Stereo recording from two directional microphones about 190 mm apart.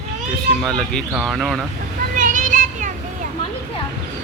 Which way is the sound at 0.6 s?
Centre (ahead or behind).